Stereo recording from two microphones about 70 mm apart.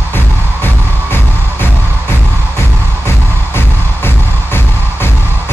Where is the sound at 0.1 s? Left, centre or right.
Left.